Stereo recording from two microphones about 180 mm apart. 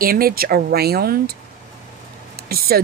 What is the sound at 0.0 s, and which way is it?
Speech, 55° right (ahead or behind).